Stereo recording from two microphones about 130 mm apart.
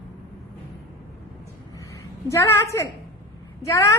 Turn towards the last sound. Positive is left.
turn(degrees=25)  # may be behind; listen again after turning